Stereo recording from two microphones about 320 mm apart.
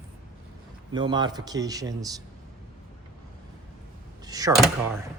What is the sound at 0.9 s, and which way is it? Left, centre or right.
Speech, centre.